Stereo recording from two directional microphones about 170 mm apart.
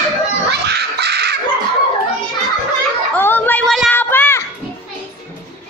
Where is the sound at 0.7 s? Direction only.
75° right (ahead or behind).